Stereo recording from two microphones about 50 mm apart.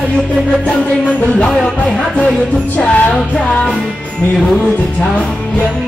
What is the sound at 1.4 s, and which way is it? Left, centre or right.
Music, centre.